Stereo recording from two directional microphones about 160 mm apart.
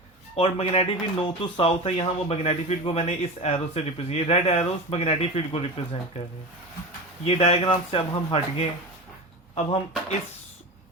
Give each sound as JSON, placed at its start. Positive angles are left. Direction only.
{"t": 0.3, "sound": "speech", "side_deg": 40}
{"t": 7.3, "sound": "speech", "side_deg": 40}